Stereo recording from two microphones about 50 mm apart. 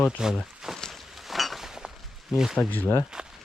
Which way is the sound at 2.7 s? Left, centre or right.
Left.